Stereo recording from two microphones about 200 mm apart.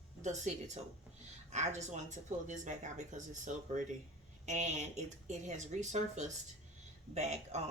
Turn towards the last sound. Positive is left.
turn(degrees=-35)  # may be behind; listen again after turning